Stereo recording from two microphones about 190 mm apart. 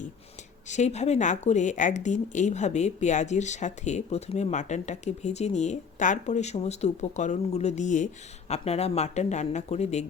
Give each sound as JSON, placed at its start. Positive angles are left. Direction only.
{"t": 0.7, "sound": "speech", "side_deg": 35}